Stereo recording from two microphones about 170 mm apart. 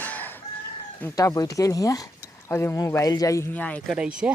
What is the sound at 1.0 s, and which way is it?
Speech, 15° left (ahead or behind).